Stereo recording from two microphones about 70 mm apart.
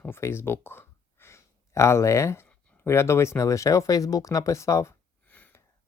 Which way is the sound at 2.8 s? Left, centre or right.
Left.